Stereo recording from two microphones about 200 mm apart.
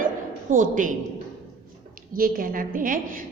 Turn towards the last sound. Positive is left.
turn(degrees=-45)  # may be behind; listen again after turning